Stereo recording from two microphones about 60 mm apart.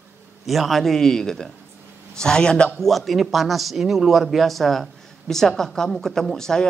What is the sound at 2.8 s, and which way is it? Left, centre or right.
A man's voice, centre.